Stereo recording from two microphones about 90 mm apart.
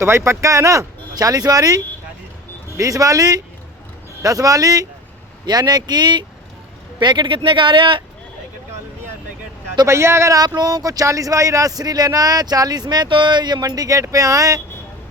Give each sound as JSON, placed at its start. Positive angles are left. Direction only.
{"t": 0.0, "sound": "speech", "side_deg": -30}
{"t": 9.8, "sound": "speech", "side_deg": -30}